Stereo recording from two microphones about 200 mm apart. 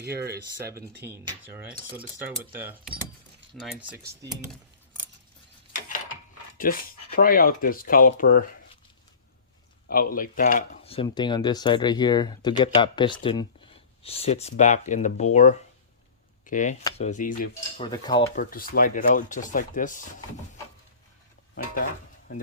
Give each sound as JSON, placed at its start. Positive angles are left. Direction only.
{"t": 0.0, "sound": "speech", "side_deg": -55}
{"t": 0.7, "sound": "speech", "side_deg": -15}
{"t": 2.2, "sound": "speech", "side_deg": -10}
{"t": 6.7, "sound": "speech", "side_deg": 45}
{"t": 9.9, "sound": "speech", "side_deg": 45}
{"t": 10.9, "sound": "speech", "side_deg": 25}
{"t": 17.7, "sound": "speech", "side_deg": 20}
{"t": 18.3, "sound": "speech", "side_deg": 45}